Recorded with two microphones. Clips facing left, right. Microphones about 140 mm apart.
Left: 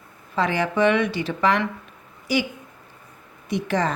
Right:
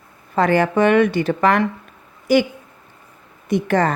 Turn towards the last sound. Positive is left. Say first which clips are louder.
# right 6 dB
turn(degrees=-55)  # may be behind; listen again after turning